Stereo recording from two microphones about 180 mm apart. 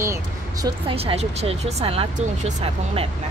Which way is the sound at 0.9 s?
35° right (ahead or behind).